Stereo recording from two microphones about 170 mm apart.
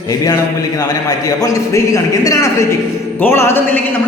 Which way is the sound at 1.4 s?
20° left (ahead or behind).